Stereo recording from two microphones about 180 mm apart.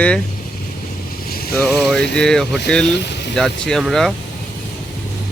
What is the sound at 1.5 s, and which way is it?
Speech, 5° left (ahead or behind).